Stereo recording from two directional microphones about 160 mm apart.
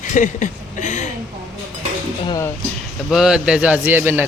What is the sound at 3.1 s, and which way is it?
A man's voice, 5° right (ahead or behind).